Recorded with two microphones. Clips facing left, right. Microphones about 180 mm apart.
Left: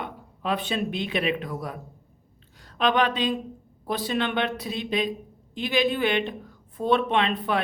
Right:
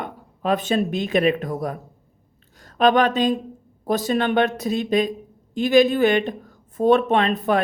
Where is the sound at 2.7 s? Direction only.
45° right (ahead or behind).